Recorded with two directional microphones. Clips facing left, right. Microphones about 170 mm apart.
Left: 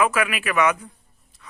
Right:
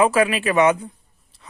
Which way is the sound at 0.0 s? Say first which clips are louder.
Right 5 dB; 30° right (ahead or behind).